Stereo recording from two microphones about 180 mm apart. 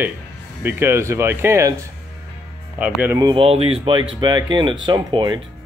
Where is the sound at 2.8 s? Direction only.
10° right (ahead or behind); by 5.4 s 25° right (ahead or behind).